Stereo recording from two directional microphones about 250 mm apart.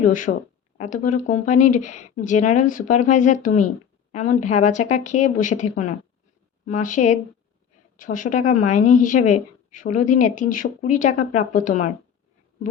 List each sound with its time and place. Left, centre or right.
0.0 s speech: left